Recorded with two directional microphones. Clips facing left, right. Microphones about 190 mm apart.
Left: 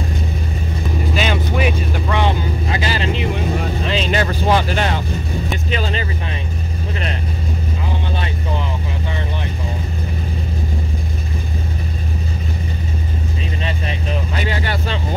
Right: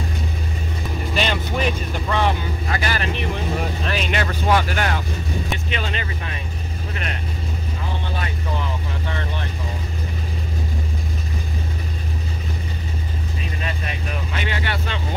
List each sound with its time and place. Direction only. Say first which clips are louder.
1.1 s vehicle: left 2 dB; 5° left (ahead or behind)
2.2 s vehicle: left 3 dB; 20° left (ahead or behind)
4.1 s vehicle: left 3 dB; 35° left (ahead or behind)
13.7 s vehicle: left 5 dB; 30° left (ahead or behind)